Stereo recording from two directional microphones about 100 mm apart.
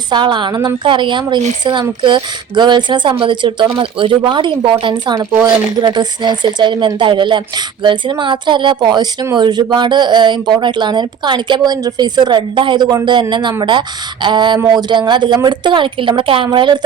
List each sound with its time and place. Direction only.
0.1 s a woman's voice: 50° right (ahead or behind)